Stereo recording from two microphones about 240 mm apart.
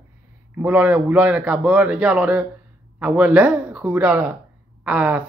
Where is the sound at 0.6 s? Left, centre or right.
Centre.